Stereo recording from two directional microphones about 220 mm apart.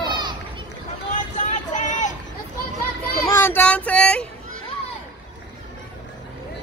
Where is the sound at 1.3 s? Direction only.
35° left (ahead or behind).